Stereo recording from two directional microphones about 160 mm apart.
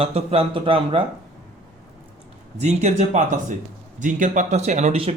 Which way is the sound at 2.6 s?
45° right (ahead or behind).